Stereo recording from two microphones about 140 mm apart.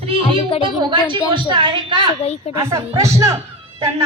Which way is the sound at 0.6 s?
35° right (ahead or behind).